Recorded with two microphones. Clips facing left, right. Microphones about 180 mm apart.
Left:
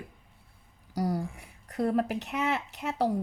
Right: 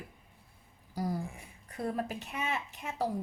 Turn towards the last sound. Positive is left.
turn(degrees=70)  # may be behind; listen again after turning